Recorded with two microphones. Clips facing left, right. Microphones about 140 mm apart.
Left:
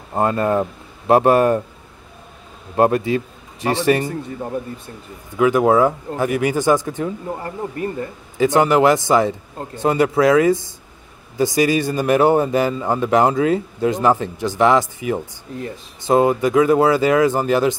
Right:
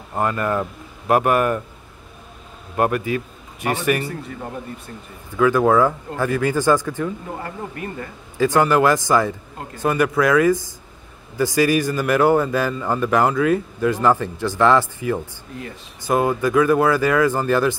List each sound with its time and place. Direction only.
0.1 s speech: 30° left (ahead or behind)
2.7 s a man's voice: 30° left (ahead or behind)
5.4 s speech: 20° left (ahead or behind)
8.4 s a man's voice: 20° left (ahead or behind)